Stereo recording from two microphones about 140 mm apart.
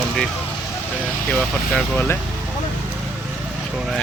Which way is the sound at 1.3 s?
10° left (ahead or behind).